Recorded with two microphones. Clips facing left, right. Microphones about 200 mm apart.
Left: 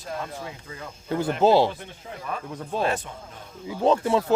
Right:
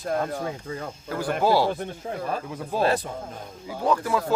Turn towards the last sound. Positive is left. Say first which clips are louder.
# left 3 dB
turn(degrees=25)  # may be behind; listen again after turning